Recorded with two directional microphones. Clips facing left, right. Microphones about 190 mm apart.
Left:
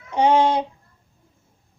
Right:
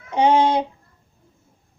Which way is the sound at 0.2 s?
20° right (ahead or behind).